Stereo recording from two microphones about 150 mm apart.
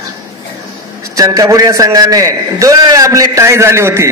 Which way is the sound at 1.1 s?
20° right (ahead or behind).